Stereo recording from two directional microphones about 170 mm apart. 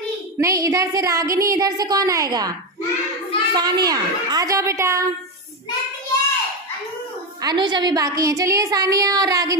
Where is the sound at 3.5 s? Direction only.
25° right (ahead or behind).